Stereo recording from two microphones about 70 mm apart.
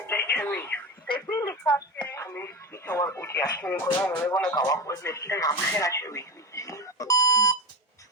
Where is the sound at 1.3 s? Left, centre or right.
Left.